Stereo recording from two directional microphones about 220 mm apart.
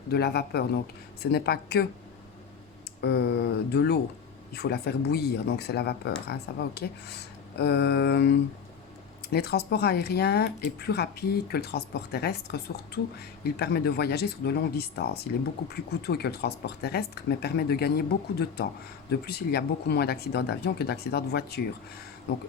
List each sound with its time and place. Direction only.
0.1 s speech: 45° left (ahead or behind)
3.0 s speech: 45° left (ahead or behind)